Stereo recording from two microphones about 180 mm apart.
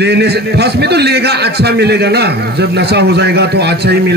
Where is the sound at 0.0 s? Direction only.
65° right (ahead or behind).